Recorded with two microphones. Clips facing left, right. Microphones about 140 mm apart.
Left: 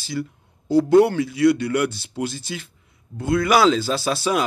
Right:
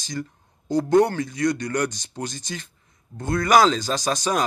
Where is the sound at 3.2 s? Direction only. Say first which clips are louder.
Left 4 dB; 45° right (ahead or behind).